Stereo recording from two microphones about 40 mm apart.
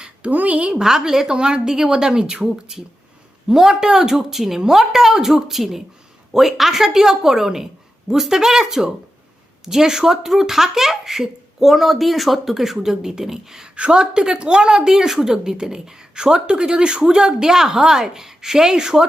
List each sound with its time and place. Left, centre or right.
0.2 s a woman's voice: right
0.7 s a woman's voice: centre
13.7 s a woman's voice: right